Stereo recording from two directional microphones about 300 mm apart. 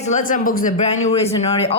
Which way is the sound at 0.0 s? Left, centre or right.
Left.